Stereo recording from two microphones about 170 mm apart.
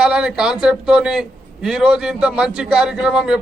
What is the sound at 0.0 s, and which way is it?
A man's voice, 5° right (ahead or behind).